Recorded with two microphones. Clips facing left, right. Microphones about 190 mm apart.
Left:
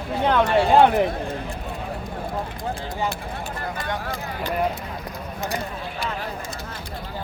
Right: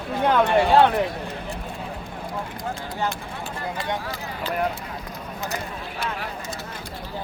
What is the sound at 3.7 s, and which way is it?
Speech, 50° left (ahead or behind).